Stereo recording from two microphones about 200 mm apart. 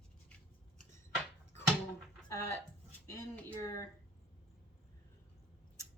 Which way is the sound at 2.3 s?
15° left (ahead or behind).